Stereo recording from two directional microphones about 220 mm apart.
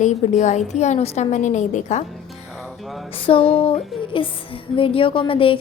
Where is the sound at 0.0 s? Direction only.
30° left (ahead or behind).